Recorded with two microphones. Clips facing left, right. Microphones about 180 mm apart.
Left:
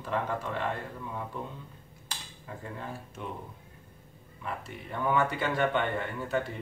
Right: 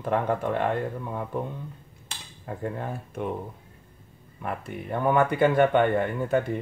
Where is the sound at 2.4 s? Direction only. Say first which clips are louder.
Right 8 dB; 55° right (ahead or behind).